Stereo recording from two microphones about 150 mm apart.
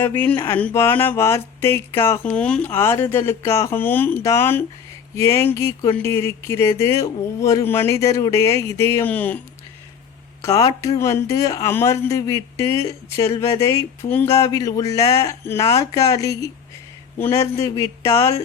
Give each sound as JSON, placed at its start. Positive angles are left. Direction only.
{"t": 0.0, "sound": "speech", "side_deg": 15}
{"t": 2.3, "sound": "speech", "side_deg": 5}
{"t": 10.4, "sound": "speech", "side_deg": 25}